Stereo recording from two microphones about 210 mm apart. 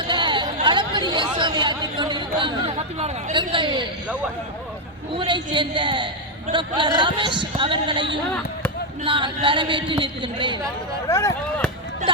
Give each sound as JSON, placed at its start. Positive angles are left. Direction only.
{"t": 0.1, "sound": "chatter", "side_deg": -20}
{"t": 1.4, "sound": "a man's voice", "side_deg": -20}
{"t": 5.1, "sound": "a man's voice", "side_deg": -20}
{"t": 9.0, "sound": "a man's voice", "side_deg": -25}
{"t": 11.1, "sound": "speech", "side_deg": 15}